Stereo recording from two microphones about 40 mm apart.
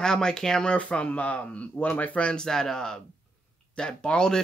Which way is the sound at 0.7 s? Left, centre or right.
Left.